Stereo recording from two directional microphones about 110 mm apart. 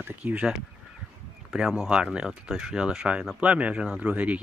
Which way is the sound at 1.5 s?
5° right (ahead or behind).